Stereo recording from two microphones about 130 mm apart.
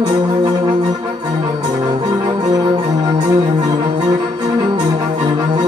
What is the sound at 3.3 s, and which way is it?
Music, 30° right (ahead or behind).